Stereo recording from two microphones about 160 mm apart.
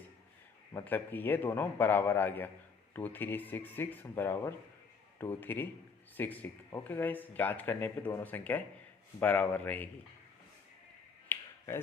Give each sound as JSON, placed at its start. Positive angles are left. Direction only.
{"t": 0.7, "sound": "speech", "side_deg": 15}
{"t": 11.3, "sound": "finger snapping", "side_deg": 15}